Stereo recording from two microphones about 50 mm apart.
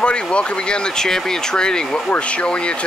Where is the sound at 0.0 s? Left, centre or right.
Left.